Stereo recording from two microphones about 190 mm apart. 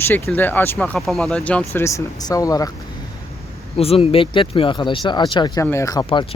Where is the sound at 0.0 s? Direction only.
10° left (ahead or behind).